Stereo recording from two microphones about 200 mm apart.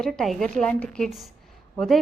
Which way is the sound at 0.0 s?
Centre (ahead or behind).